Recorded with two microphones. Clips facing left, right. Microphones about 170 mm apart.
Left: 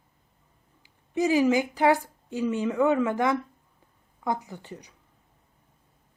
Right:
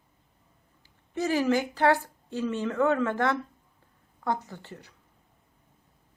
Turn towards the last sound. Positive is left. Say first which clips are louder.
# left 3 dB
turn(degrees=15)  # may be behind; listen again after turning